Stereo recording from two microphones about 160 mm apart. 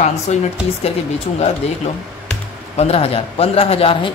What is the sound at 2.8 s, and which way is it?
A woman's voice, 40° left (ahead or behind).